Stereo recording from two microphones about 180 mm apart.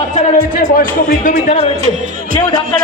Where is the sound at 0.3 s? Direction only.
50° left (ahead or behind).